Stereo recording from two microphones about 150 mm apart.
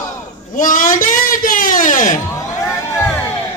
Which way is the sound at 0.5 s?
65° left (ahead or behind).